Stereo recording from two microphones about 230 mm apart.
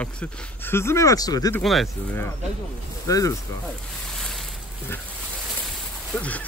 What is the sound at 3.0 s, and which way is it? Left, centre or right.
Speech, centre.